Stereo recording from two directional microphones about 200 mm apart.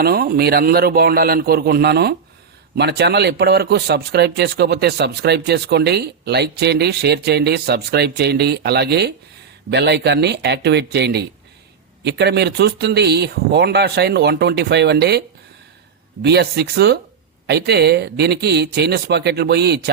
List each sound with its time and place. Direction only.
0.0 s a man's voice: 50° right (ahead or behind)
16.2 s a man's voice: 55° right (ahead or behind)